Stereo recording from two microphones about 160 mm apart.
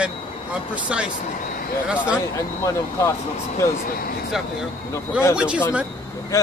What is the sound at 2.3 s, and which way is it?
Speech, 20° left (ahead or behind).